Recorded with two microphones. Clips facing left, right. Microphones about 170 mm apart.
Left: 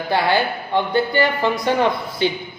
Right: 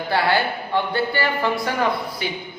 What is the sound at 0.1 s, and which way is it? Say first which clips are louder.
Speech: left 2 dB; 15° left (ahead or behind).